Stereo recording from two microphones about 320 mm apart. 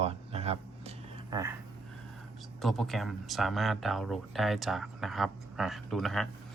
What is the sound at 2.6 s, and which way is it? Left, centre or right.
Speech, centre.